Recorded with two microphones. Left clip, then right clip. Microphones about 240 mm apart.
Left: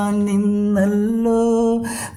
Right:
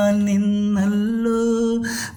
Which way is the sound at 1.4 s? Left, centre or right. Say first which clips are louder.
Left 3 dB; centre.